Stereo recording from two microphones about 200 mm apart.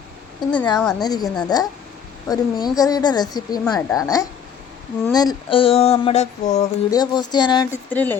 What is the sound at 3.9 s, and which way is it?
Speech, 20° left (ahead or behind).